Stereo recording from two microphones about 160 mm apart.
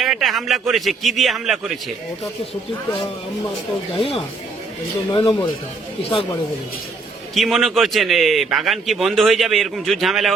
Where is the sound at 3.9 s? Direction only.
35° left (ahead or behind).